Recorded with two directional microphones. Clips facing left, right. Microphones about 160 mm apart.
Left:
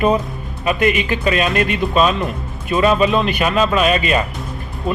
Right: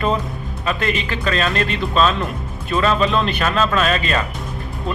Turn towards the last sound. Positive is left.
turn(degrees=15)  # may be behind; listen again after turning